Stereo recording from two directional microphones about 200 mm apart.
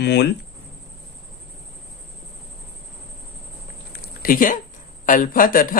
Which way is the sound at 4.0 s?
45° left (ahead or behind).